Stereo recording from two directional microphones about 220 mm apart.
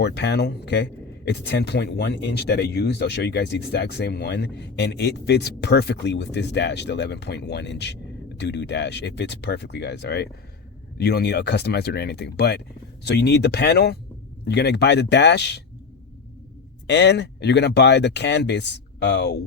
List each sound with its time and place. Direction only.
0.0 s speech: 50° left (ahead or behind)
16.8 s speech: 50° left (ahead or behind)